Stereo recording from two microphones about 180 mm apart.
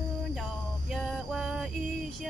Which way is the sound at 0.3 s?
5° right (ahead or behind).